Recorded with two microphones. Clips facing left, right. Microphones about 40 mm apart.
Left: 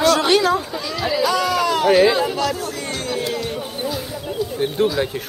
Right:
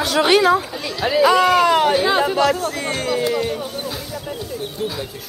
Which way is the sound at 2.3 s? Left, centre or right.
Centre.